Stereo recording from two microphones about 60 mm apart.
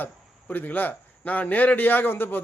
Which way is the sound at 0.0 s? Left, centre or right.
Left.